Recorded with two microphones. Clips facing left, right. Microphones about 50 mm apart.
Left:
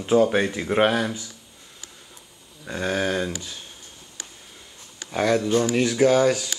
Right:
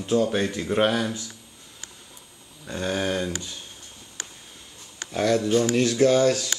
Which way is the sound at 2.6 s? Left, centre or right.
Centre.